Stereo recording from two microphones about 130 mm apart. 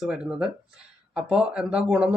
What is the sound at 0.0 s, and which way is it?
Speech, 5° right (ahead or behind).